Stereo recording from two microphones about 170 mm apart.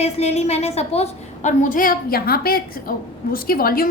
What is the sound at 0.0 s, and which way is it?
A woman's voice, 40° left (ahead or behind).